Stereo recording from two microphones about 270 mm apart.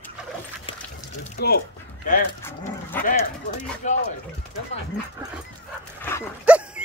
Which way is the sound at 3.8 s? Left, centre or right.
Left.